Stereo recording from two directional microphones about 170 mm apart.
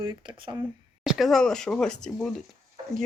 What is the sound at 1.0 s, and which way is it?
Speech, centre (ahead or behind).